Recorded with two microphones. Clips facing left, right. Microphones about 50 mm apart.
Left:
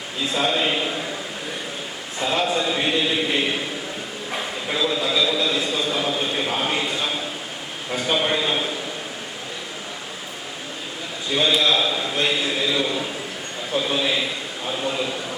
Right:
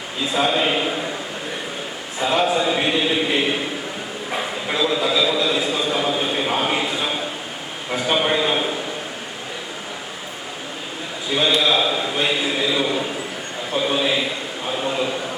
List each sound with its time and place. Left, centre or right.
0.3 s a man's voice: centre
2.1 s a man's voice: centre
11.3 s a man's voice: centre
14.7 s a sound: centre